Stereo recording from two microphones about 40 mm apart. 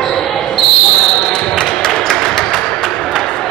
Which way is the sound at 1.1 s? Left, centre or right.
Left.